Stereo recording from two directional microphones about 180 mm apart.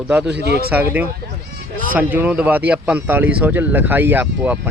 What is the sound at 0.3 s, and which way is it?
Speech, 65° right (ahead or behind).